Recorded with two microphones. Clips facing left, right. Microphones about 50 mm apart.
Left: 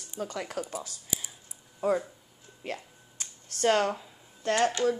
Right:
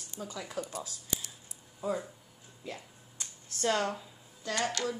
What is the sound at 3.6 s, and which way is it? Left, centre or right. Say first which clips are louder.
Speech: left 5 dB; left.